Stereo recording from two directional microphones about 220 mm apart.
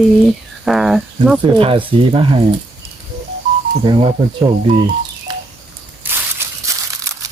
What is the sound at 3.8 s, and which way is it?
Speech, 20° right (ahead or behind).